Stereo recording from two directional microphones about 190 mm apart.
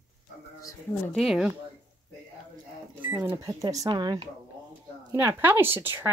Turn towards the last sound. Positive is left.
turn(degrees=-10)  # may be behind; listen again after turning